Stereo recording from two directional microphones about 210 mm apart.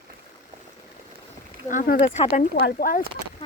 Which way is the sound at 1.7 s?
40° left (ahead or behind).